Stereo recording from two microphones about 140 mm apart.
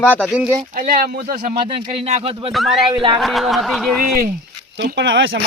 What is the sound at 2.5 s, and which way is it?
Speech, centre (ahead or behind).